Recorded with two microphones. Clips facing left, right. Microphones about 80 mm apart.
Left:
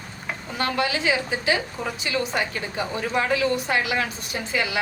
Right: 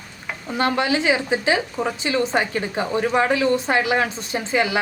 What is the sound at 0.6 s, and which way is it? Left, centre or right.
A woman's voice, right.